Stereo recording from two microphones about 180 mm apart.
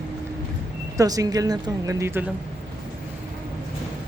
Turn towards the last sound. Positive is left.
turn(degrees=-15)  # may be behind; listen again after turning